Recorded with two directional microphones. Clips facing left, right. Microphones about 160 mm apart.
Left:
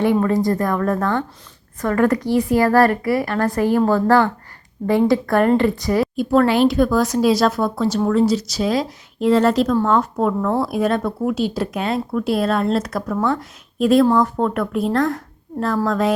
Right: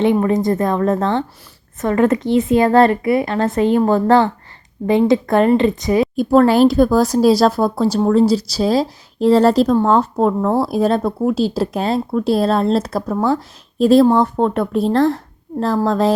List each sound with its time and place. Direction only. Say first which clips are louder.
0.0 s speech: right 2 dB; 20° right (ahead or behind)
6.1 s speech: right 4 dB; 40° right (ahead or behind)